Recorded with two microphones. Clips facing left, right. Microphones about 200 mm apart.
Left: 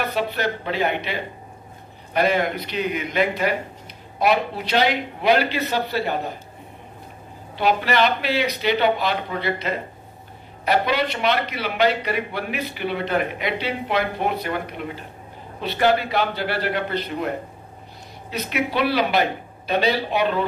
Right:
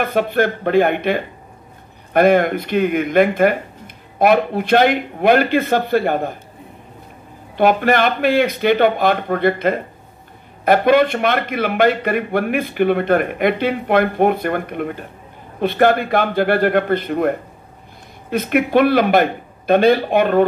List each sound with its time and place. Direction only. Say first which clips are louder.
0.0 s a man's voice: right 7 dB; 50° right (ahead or behind)
7.5 s a man's voice: right 6 dB; 50° right (ahead or behind)